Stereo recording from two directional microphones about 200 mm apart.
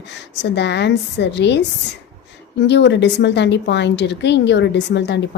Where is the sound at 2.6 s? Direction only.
60° left (ahead or behind).